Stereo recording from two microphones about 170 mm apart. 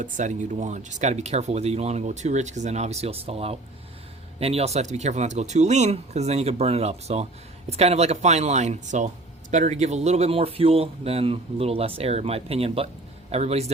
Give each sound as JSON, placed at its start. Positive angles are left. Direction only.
{"t": 0.0, "sound": "speech", "side_deg": -45}